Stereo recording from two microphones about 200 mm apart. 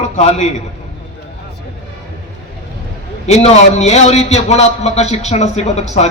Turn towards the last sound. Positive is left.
turn(degrees=35)  # may be behind; listen again after turning